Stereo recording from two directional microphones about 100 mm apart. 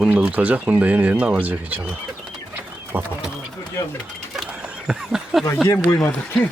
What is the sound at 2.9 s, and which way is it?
Speech, 20° right (ahead or behind).